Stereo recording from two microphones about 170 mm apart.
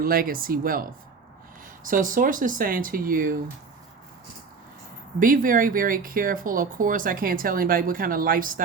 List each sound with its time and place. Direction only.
0.0 s speech: 55° right (ahead or behind)
5.2 s speech: 55° right (ahead or behind)